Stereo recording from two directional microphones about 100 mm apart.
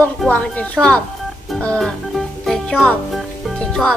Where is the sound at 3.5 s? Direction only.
10° left (ahead or behind).